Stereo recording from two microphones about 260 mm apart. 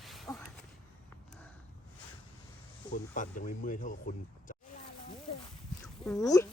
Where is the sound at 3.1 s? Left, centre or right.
Left.